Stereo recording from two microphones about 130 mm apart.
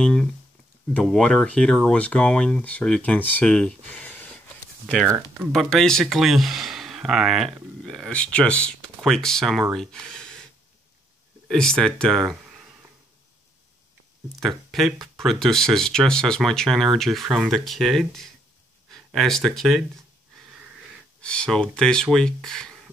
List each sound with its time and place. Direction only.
0.0 s speech: 5° left (ahead or behind)
5.5 s speech: 5° left (ahead or behind)
11.4 s speech: 5° left (ahead or behind)
14.4 s speech: centre (ahead or behind)
21.2 s speech: 10° left (ahead or behind)